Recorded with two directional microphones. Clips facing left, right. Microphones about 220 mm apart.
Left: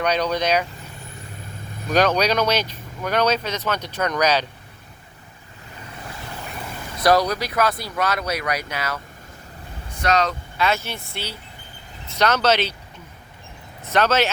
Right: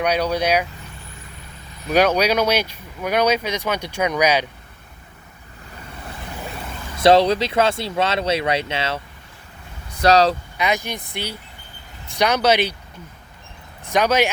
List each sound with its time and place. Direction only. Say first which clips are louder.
0.0 s speech: right 1 dB; 10° right (ahead or behind)
1.9 s speech: right 2 dB; 10° right (ahead or behind)
6.9 s speech: right 4 dB; 25° right (ahead or behind)
10.0 s speech: right 6 dB; 35° right (ahead or behind)
10.6 s speech: left 2 dB; 15° right (ahead or behind)
13.8 s speech: right 1 dB; 15° right (ahead or behind)